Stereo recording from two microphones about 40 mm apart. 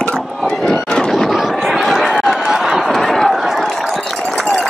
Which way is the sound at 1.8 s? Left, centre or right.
Centre.